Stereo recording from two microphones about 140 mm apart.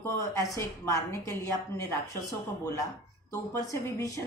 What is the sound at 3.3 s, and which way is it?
Speech, 20° left (ahead or behind).